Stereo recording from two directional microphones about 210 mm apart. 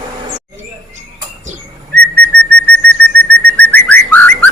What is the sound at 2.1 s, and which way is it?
Whistle, 5° left (ahead or behind).